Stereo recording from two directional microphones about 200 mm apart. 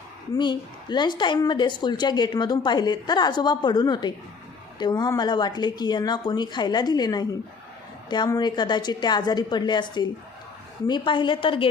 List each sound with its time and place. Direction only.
0.3 s a woman's voice: 20° left (ahead or behind)